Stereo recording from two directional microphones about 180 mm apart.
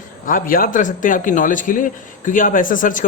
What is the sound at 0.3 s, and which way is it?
A man's voice, 50° left (ahead or behind).